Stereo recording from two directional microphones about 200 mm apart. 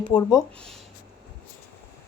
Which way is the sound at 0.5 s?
5° left (ahead or behind).